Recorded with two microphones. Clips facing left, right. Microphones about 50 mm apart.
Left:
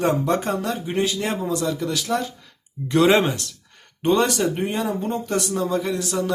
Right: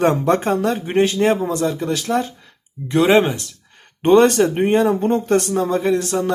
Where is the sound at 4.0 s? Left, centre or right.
Right.